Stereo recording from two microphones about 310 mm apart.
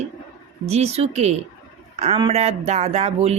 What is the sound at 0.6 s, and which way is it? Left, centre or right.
Speech, centre.